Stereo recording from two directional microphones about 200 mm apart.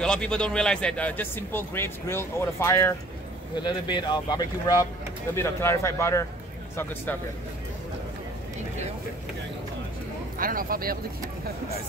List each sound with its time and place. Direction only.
0.0 s speech: 5° left (ahead or behind)
10.3 s speech: 45° right (ahead or behind)